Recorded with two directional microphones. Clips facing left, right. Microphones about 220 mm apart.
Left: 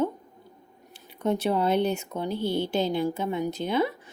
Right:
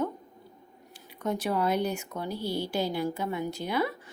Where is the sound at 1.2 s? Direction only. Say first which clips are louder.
Left 4 dB; 25° left (ahead or behind).